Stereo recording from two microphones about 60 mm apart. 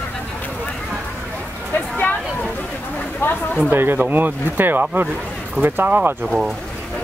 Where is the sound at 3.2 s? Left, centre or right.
Left.